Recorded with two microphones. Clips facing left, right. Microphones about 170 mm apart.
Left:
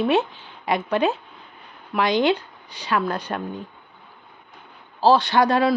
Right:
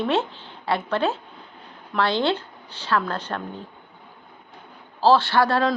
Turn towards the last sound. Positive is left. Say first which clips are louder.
# left 2 dB
turn(degrees=15)  # may be behind; listen again after turning